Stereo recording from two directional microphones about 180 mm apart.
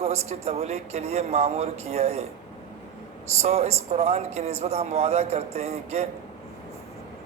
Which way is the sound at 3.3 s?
35° right (ahead or behind).